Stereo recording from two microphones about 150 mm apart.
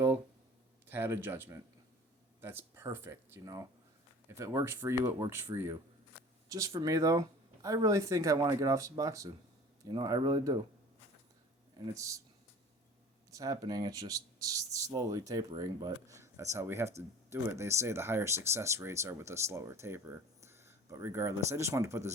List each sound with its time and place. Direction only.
0.9 s speech: 15° right (ahead or behind)
11.9 s speech: 20° right (ahead or behind)
13.3 s speech: 25° right (ahead or behind)